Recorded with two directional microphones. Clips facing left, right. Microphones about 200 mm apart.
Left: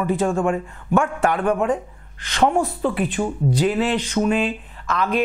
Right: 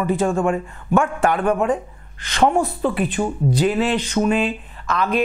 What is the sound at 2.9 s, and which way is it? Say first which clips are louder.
Speech: right 1 dB; 15° right (ahead or behind).